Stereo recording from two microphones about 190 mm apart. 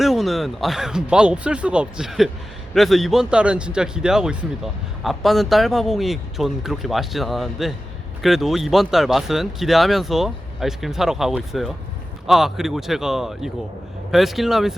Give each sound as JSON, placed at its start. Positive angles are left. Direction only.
{"t": 0.0, "sound": "speech", "side_deg": 0}